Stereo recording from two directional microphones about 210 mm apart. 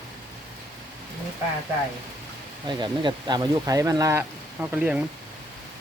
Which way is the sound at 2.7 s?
20° right (ahead or behind).